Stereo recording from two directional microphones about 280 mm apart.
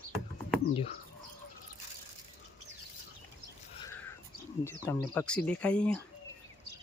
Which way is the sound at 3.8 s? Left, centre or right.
Centre.